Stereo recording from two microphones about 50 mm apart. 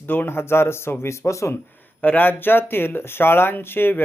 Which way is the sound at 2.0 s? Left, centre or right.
Left.